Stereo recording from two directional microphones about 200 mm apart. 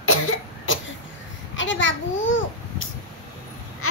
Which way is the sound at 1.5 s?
70° left (ahead or behind).